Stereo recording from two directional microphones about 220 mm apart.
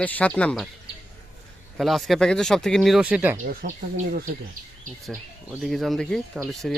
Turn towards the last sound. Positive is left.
turn(degrees=0)  # may be behind; listen again after turning